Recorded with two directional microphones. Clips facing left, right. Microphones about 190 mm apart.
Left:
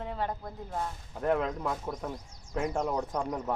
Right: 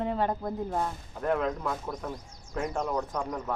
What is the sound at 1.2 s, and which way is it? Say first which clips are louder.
A man's voice: even; 15° left (ahead or behind).